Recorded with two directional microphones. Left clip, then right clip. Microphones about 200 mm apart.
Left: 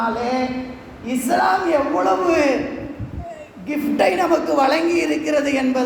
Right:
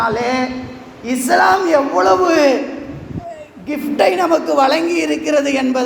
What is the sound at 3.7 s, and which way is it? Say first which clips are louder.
A man's voice: right 3 dB; 25° right (ahead or behind).